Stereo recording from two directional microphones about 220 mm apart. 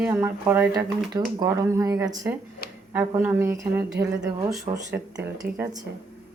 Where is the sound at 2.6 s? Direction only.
40° left (ahead or behind).